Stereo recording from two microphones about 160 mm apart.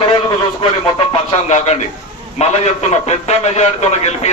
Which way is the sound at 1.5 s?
45° left (ahead or behind).